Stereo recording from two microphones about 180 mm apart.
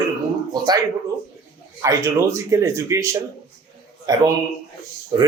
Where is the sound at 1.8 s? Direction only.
20° right (ahead or behind).